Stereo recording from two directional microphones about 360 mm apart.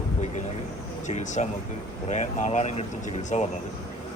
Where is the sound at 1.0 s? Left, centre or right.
Centre.